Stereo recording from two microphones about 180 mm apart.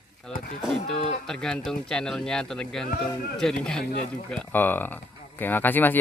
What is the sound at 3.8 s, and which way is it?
Speech, 50° left (ahead or behind).